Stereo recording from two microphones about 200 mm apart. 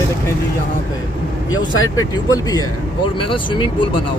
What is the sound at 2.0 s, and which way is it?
Speech, 15° left (ahead or behind).